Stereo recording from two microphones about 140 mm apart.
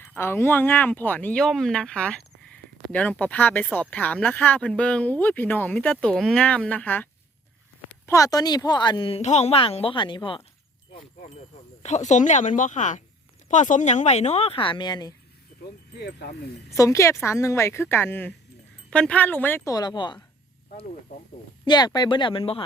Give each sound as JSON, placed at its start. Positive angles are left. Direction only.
{"t": 0.1, "sound": "speech", "side_deg": 15}
{"t": 8.0, "sound": "speech", "side_deg": 20}
{"t": 9.2, "sound": "a woman's voice", "side_deg": 55}
{"t": 11.8, "sound": "speech", "side_deg": 55}
{"t": 16.6, "sound": "speech", "side_deg": 20}
{"t": 19.7, "sound": "a woman's voice", "side_deg": 30}
{"t": 21.7, "sound": "a woman's voice", "side_deg": 30}